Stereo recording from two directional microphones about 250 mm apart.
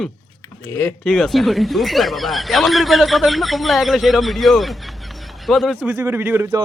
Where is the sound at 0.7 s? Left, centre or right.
Centre.